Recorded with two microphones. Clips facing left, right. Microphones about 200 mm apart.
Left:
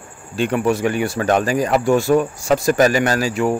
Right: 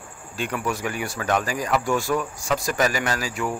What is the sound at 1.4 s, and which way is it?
Speech, 65° left (ahead or behind).